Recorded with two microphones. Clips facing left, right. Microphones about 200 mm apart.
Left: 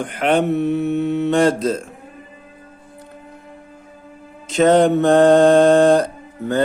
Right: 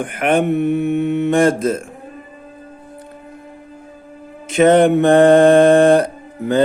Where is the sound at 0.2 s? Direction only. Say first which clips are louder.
Right 1 dB; 10° right (ahead or behind).